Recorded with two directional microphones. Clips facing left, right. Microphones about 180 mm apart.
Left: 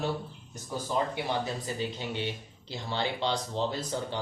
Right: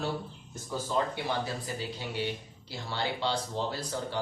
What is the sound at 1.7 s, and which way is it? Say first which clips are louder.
Speech: left 3 dB; 20° left (ahead or behind).